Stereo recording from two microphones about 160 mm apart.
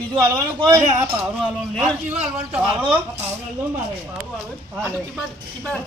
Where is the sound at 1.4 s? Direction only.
Centre (ahead or behind).